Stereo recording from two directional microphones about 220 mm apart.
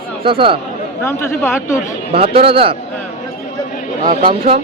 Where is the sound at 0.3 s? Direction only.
25° right (ahead or behind).